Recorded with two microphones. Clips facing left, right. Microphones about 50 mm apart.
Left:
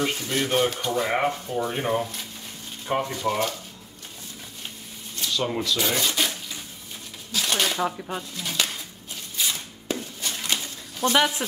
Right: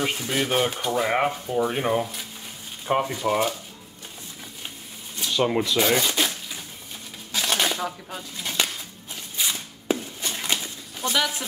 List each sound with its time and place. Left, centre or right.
0.0 s speech: centre
5.3 s speech: right
5.9 s rub: centre
7.3 s a sound: centre
7.7 s speech: centre
8.4 s speech: centre
9.5 s a sound: centre
11.1 s speech: left